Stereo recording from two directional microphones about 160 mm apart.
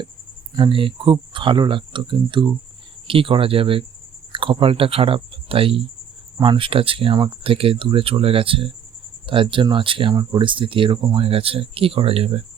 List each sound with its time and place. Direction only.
0.5 s speech: 30° right (ahead or behind)